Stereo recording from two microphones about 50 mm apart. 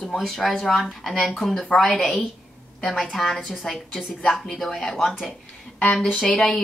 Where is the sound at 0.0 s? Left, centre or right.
Centre.